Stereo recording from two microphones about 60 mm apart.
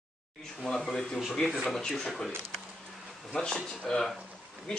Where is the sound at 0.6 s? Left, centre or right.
Centre.